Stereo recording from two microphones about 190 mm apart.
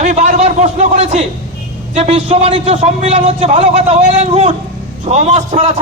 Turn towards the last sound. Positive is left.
turn(degrees=-35)  # may be behind; listen again after turning